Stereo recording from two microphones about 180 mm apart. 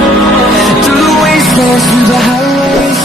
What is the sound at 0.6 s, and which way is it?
Music, centre (ahead or behind).